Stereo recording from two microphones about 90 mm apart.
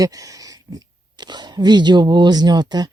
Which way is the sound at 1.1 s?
55° right (ahead or behind).